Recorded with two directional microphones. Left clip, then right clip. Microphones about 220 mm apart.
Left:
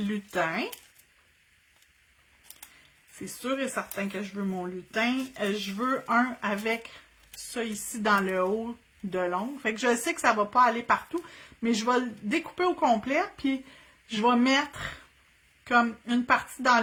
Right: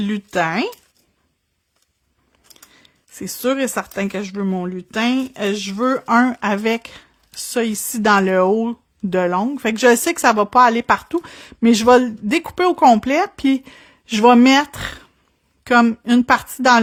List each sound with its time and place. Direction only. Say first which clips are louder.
0.0 s speech: right 9 dB; 45° right (ahead or behind)
3.2 s speech: right 12 dB; 45° right (ahead or behind)